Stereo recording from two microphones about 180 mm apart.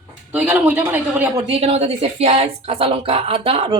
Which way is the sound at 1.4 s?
35° right (ahead or behind).